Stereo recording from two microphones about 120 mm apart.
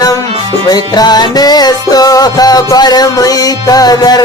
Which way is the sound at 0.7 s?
35° left (ahead or behind).